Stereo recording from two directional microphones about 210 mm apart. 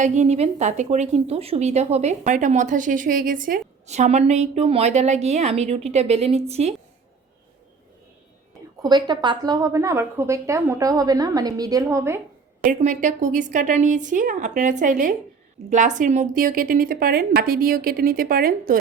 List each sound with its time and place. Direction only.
0.0 s speech: 35° right (ahead or behind)
8.8 s a woman's voice: 20° right (ahead or behind)
12.6 s a woman's voice: 35° right (ahead or behind)